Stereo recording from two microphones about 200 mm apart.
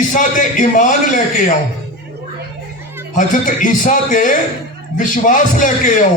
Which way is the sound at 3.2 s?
40° left (ahead or behind).